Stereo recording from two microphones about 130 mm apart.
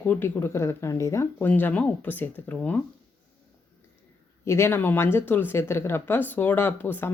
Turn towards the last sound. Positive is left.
turn(degrees=15)  # may be behind; listen again after turning